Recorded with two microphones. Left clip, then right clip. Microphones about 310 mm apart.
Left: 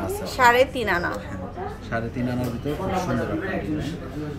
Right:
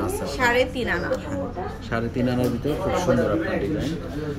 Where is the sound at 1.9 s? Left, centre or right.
Centre.